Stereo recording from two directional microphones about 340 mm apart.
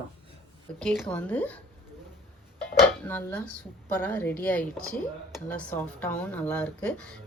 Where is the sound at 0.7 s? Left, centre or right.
Centre.